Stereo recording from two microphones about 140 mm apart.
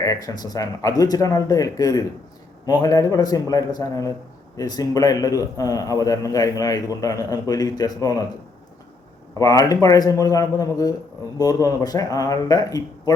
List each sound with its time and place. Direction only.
0.0 s a man's voice: 25° left (ahead or behind)
9.4 s a man's voice: 25° left (ahead or behind)